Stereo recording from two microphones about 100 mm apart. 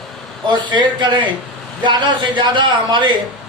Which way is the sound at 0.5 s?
50° right (ahead or behind).